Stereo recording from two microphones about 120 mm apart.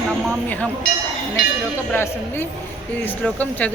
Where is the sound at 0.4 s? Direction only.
15° left (ahead or behind).